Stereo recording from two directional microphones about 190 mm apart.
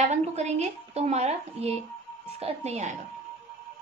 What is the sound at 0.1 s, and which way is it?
Speech, 35° right (ahead or behind).